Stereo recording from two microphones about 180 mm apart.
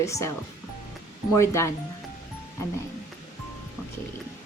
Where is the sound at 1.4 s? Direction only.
15° left (ahead or behind).